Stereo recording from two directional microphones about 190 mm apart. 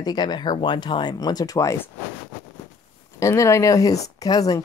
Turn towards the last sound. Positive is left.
turn(degrees=20)  # may be behind; listen again after turning